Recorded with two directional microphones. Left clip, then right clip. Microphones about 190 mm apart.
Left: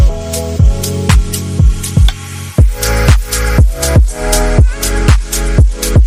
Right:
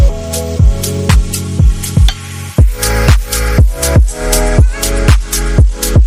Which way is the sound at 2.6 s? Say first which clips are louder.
Even; centre (ahead or behind).